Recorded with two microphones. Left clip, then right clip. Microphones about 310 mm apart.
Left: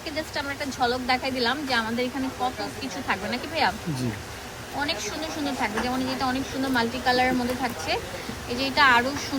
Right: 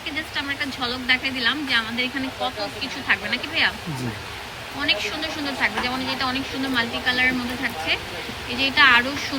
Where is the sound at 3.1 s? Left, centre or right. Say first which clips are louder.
Right 6 dB; centre.